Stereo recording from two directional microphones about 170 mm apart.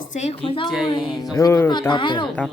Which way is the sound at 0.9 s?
25° left (ahead or behind).